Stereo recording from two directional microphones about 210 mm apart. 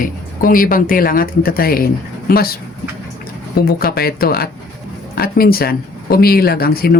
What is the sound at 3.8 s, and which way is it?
Speech, 45° left (ahead or behind).